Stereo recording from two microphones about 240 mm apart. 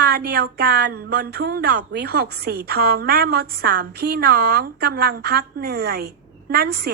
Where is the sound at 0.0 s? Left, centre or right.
Right.